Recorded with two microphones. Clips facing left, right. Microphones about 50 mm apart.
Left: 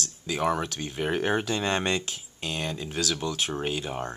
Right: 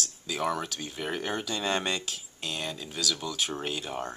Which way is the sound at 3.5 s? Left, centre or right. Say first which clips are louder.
Left 3 dB; centre.